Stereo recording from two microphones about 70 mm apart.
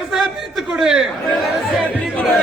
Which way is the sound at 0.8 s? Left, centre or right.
Centre.